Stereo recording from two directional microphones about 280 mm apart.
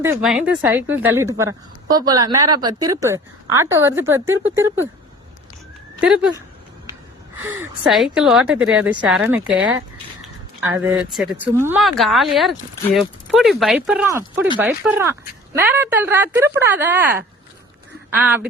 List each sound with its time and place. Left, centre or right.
0.0 s a woman's voice: centre
6.0 s a woman's voice: centre
7.4 s a woman's voice: centre